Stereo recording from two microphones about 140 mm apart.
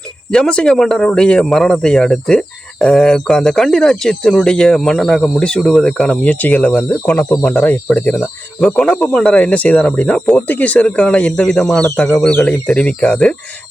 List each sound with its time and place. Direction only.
0.3 s speech: 5° left (ahead or behind)
11.9 s speech: 15° left (ahead or behind)
12.1 s speech: 5° left (ahead or behind)